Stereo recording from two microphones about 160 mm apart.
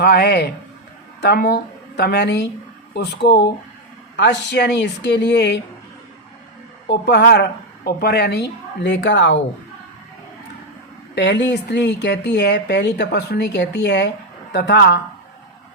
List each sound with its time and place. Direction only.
0.0 s speech: 90° left
7.0 s speech: 90° left
11.1 s speech: 90° left